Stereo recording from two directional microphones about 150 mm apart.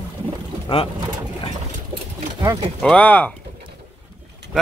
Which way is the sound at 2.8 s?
10° left (ahead or behind).